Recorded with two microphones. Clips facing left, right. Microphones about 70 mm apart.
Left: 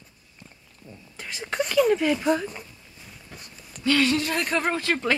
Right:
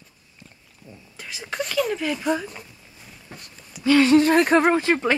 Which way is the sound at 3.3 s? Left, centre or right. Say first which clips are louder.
Right 3 dB; right.